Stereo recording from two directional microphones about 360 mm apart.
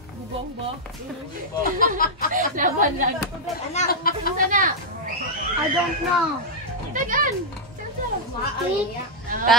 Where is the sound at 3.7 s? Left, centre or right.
Left.